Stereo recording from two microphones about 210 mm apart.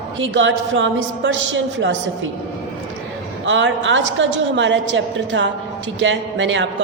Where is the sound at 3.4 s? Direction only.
65° right (ahead or behind).